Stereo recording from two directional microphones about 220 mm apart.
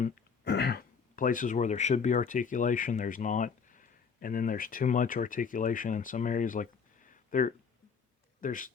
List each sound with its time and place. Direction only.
0.4 s a man's voice: 50° left (ahead or behind)